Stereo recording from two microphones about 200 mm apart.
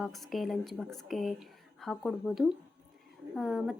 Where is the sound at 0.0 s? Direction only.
Centre (ahead or behind).